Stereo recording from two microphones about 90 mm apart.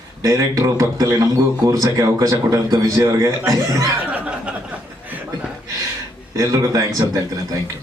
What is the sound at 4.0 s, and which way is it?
Speech, 15° right (ahead or behind).